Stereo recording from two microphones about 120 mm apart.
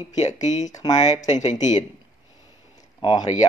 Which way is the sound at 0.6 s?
30° left (ahead or behind).